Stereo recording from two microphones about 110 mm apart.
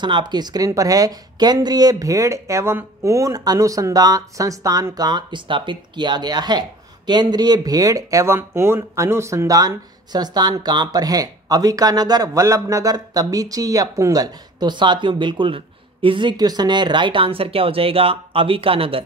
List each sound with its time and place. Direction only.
0.0 s speech: 45° right (ahead or behind)